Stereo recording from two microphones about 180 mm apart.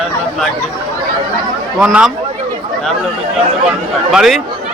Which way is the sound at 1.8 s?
5° right (ahead or behind).